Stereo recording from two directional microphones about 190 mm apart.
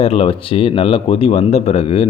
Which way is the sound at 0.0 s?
30° left (ahead or behind).